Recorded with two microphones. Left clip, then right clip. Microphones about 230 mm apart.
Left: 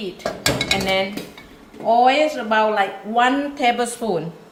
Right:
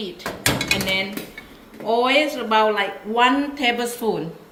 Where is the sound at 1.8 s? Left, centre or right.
Left.